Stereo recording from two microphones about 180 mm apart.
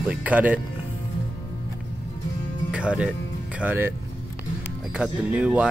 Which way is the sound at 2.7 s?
5° right (ahead or behind).